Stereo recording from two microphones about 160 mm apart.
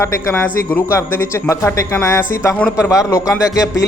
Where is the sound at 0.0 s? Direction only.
20° left (ahead or behind).